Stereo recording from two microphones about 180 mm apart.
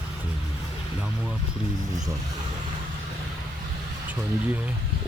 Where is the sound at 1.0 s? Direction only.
5° right (ahead or behind).